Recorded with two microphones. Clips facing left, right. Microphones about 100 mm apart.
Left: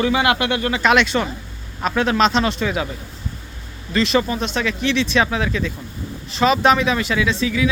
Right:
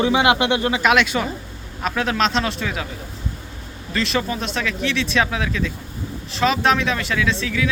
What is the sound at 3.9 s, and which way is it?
Speech, centre (ahead or behind).